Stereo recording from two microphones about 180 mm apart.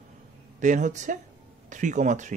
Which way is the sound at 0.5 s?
45° right (ahead or behind).